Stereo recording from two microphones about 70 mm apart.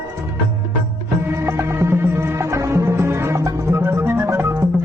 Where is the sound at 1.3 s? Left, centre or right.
Right.